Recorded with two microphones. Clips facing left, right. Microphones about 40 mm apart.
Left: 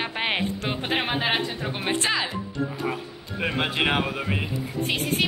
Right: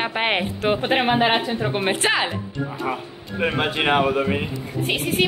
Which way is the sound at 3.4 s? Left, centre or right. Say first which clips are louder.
Right 3 dB; centre.